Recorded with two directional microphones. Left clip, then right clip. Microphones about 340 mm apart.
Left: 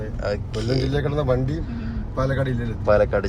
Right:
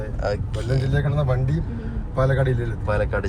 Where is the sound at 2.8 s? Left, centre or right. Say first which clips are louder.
Left 6 dB; centre.